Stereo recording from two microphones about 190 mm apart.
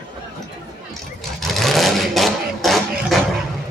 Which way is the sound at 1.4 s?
Centre (ahead or behind).